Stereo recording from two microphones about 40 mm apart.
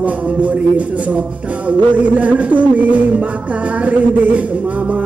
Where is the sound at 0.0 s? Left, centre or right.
Right.